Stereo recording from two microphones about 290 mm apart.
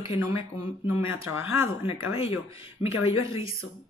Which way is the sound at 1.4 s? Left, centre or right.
Left.